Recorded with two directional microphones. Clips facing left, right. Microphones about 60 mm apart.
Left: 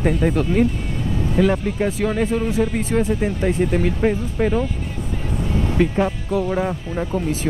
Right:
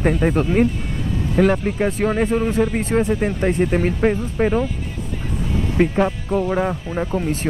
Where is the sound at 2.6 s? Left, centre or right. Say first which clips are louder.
Right 1 dB; right.